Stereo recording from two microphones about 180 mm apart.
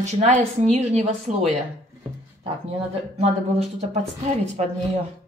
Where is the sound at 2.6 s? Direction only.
35° right (ahead or behind).